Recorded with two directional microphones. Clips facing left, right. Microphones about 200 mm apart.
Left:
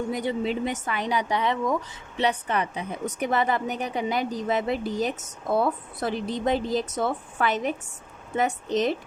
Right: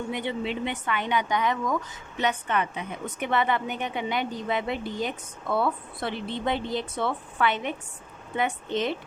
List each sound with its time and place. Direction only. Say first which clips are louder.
0.1 s speech: left 3 dB; 40° left (ahead or behind)